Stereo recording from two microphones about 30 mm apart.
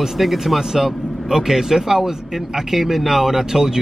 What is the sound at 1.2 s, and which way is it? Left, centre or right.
Speech, centre.